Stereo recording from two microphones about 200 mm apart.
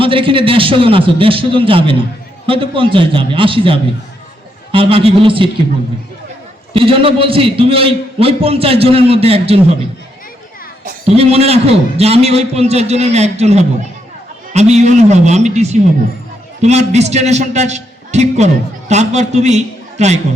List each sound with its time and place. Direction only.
0.0 s a man's voice: 25° right (ahead or behind)
6.7 s a man's voice: 25° right (ahead or behind)
11.0 s a man's voice: 30° right (ahead or behind)